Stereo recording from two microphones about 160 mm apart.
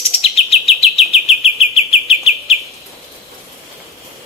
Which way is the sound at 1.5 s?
40° left (ahead or behind).